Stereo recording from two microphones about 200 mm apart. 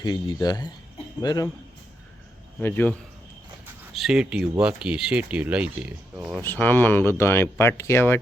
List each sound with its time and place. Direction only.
0.0 s speech: 20° left (ahead or behind)
2.6 s speech: 10° left (ahead or behind)
3.9 s speech: centre (ahead or behind)
6.4 s speech: 10° left (ahead or behind)